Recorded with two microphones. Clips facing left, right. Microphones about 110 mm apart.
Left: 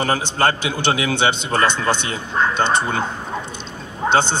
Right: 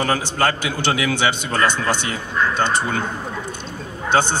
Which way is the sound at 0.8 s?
25° left (ahead or behind).